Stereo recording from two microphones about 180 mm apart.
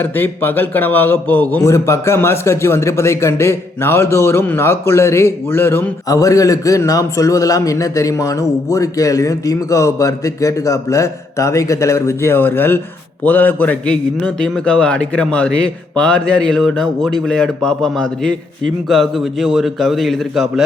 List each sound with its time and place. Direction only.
0.0 s a man's voice: 10° left (ahead or behind)